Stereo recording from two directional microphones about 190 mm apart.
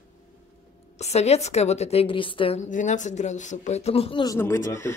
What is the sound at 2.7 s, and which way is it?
A woman's voice, 40° left (ahead or behind).